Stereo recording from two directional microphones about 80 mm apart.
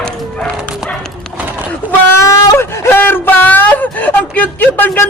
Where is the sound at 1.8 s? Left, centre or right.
Right.